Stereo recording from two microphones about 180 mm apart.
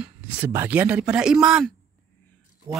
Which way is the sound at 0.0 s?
10° right (ahead or behind).